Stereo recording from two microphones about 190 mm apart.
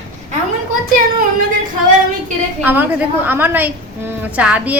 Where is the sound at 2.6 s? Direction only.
10° right (ahead or behind).